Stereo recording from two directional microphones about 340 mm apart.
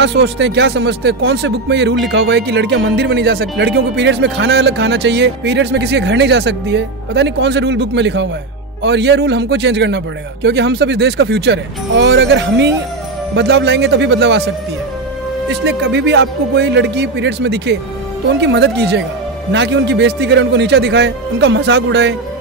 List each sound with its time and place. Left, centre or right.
0.0 s speech: right
15.6 s speech: right